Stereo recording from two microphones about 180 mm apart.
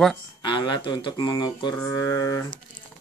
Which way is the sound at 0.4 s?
25° left (ahead or behind).